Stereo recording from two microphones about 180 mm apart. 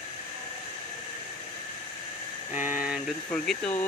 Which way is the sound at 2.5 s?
10° right (ahead or behind).